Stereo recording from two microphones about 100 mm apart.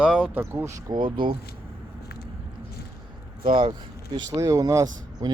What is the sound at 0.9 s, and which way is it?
Speech, 55° right (ahead or behind).